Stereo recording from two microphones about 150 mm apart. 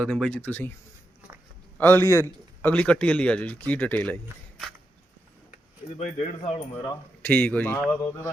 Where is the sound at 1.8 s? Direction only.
15° left (ahead or behind).